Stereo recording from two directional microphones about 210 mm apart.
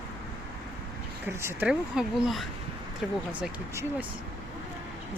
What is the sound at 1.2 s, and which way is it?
Speech, 10° right (ahead or behind).